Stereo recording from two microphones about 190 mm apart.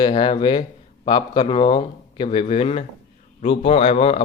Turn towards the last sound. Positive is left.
turn(degrees=30)  # may be behind; listen again after turning